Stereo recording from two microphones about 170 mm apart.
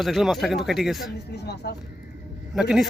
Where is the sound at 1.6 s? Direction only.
75° left (ahead or behind).